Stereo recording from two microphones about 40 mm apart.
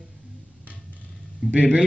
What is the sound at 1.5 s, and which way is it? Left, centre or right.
Speech, right.